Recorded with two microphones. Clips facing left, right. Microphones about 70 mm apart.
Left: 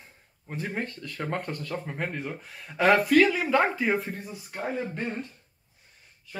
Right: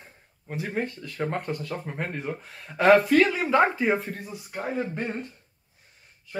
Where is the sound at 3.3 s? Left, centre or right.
Centre.